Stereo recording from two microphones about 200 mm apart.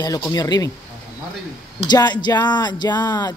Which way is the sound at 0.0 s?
15° left (ahead or behind).